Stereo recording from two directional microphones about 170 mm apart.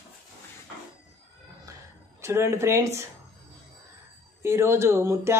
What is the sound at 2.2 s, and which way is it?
Speech, 15° right (ahead or behind).